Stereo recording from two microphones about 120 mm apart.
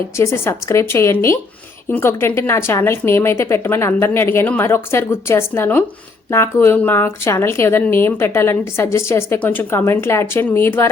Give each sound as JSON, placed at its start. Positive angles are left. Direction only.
{"t": 0.2, "sound": "a woman's voice", "side_deg": 20}